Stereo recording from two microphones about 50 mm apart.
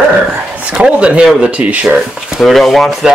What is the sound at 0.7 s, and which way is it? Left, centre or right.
Speech, right.